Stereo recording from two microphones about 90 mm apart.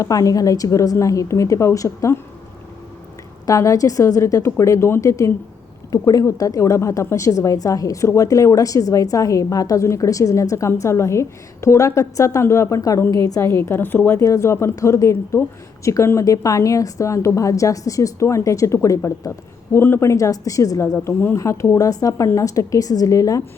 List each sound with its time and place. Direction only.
0.0 s a woman's voice: 40° left (ahead or behind)
3.4 s a woman's voice: 40° left (ahead or behind); by 14.1 s 20° left (ahead or behind)
14.1 s a woman's voice: 35° left (ahead or behind)
19.7 s a woman's voice: 25° left (ahead or behind)
21.1 s a woman's voice: 25° left (ahead or behind)
21.4 s a woman's voice: 35° left (ahead or behind)